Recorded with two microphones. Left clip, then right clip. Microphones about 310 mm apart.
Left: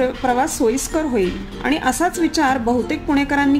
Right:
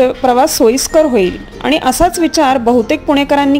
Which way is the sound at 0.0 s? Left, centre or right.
Right.